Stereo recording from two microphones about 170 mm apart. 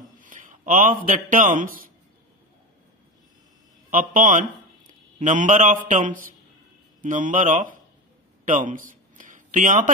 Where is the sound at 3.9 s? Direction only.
50° right (ahead or behind).